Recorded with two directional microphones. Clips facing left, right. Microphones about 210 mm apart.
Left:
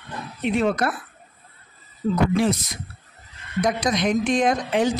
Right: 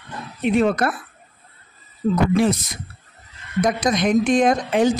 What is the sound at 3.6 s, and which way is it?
Speech, 50° right (ahead or behind).